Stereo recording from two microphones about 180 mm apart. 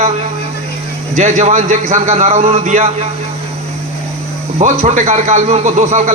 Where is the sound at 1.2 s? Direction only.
40° right (ahead or behind).